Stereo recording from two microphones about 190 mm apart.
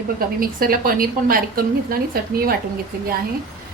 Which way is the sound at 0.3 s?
50° right (ahead or behind).